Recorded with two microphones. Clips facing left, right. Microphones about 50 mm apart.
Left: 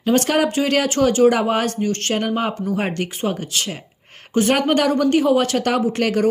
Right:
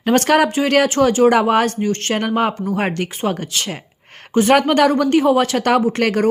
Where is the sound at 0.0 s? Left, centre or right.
Right.